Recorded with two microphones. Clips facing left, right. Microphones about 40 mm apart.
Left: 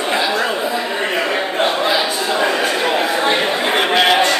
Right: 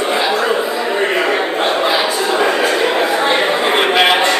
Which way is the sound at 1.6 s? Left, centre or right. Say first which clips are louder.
Right 1 dB; centre.